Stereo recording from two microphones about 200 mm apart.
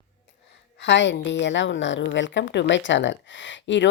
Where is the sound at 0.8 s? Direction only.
60° left (ahead or behind).